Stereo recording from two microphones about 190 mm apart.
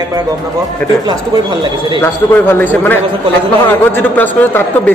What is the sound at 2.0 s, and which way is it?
A man's voice, 10° left (ahead or behind).